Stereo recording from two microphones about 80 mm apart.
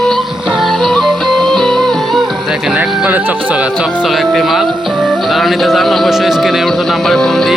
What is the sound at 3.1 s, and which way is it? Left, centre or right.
Speech, right.